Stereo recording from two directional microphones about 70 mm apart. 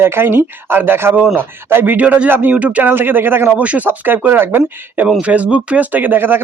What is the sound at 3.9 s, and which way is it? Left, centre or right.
Speech, right.